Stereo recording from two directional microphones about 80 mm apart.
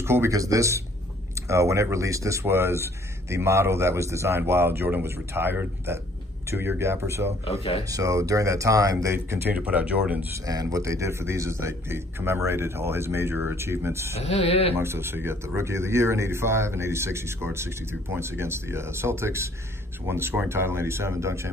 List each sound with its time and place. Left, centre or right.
0.0 s speech: right
0.3 s speech: right
9.6 s speech: centre
10.4 s speech: right
10.8 s speech: right